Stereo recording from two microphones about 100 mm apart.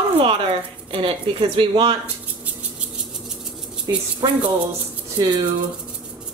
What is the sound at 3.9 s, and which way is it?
Speech, 40° right (ahead or behind).